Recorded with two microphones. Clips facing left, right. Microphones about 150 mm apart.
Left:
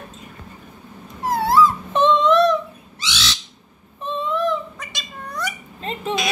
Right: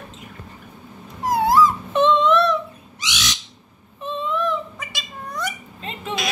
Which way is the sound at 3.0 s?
15° right (ahead or behind).